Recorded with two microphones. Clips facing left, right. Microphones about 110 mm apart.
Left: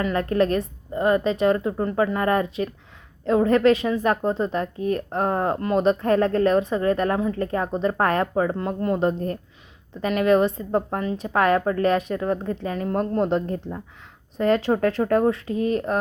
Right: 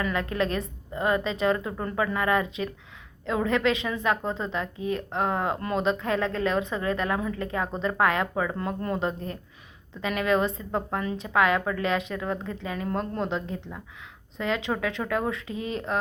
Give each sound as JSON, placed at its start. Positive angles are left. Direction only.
{"t": 0.0, "sound": "speech", "side_deg": 40}
{"t": 9.0, "sound": "speech", "side_deg": 45}
{"t": 10.1, "sound": "speech", "side_deg": 35}
{"t": 11.3, "sound": "speech", "side_deg": 45}
{"t": 12.9, "sound": "a woman's voice", "side_deg": 25}
{"t": 13.2, "sound": "speech", "side_deg": 50}
{"t": 15.5, "sound": "speech", "side_deg": -25}